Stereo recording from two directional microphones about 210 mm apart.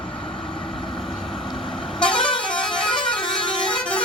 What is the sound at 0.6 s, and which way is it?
Vehicle, centre (ahead or behind).